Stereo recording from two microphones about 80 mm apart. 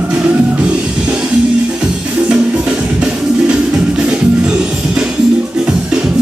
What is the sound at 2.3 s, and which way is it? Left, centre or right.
Music, centre.